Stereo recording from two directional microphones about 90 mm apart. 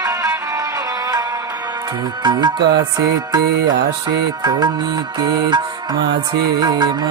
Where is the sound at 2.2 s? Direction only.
55° right (ahead or behind).